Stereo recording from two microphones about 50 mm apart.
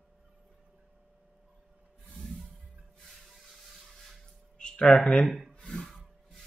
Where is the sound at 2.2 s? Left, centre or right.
Centre.